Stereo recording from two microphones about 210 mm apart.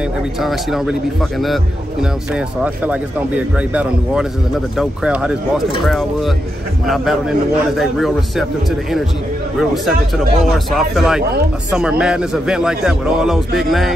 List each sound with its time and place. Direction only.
0.4 s a man's voice: centre (ahead or behind)